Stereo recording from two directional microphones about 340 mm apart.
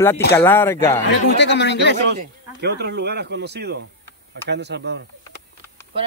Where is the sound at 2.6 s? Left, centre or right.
Right.